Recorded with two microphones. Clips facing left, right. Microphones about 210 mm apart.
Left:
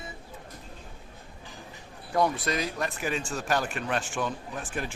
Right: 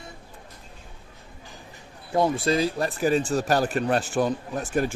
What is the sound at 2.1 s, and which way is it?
Speech, 25° right (ahead or behind).